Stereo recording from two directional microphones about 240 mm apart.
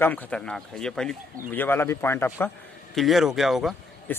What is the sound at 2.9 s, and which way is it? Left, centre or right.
Speech, centre.